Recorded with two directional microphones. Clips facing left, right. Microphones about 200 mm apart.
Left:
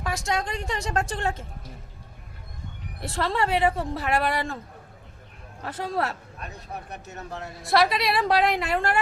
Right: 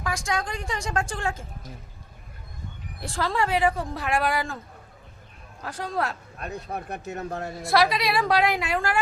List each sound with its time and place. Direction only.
0.0 s a sound: 5° left (ahead or behind)
0.5 s speech: centre (ahead or behind)
3.0 s speech: centre (ahead or behind)
5.6 s speech: 5° left (ahead or behind)
6.4 s speech: 50° right (ahead or behind)
7.3 s a woman's voice: 40° right (ahead or behind)
7.6 s speech: centre (ahead or behind)